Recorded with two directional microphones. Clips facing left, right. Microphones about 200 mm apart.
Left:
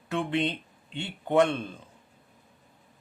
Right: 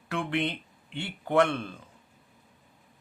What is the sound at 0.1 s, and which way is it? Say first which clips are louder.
Speech: left 2 dB; 20° left (ahead or behind).